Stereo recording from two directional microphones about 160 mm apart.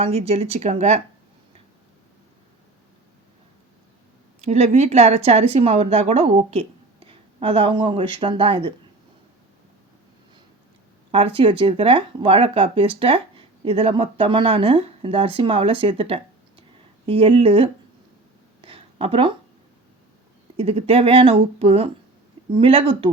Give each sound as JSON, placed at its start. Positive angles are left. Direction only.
{"t": 0.0, "sound": "speech", "side_deg": -40}
{"t": 4.4, "sound": "speech", "side_deg": -45}
{"t": 11.1, "sound": "speech", "side_deg": -35}
{"t": 18.6, "sound": "a sound", "side_deg": -35}
{"t": 20.6, "sound": "speech", "side_deg": -40}